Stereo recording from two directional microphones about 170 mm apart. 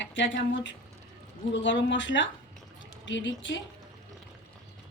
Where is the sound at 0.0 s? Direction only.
90° left.